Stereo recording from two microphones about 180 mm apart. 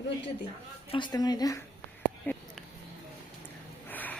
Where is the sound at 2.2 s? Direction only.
5° left (ahead or behind).